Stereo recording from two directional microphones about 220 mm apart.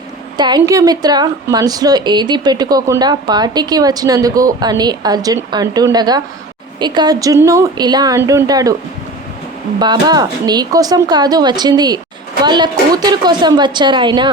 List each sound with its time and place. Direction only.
0.3 s a woman's voice: 20° right (ahead or behind)
9.7 s a woman's voice: 20° right (ahead or behind)